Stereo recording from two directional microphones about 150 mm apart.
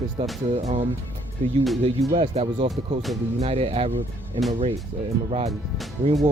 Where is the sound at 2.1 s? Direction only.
40° right (ahead or behind).